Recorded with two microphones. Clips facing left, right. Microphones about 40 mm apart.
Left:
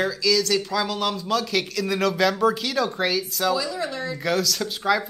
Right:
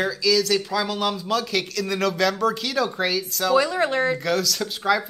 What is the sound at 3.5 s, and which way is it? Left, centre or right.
Speech, right.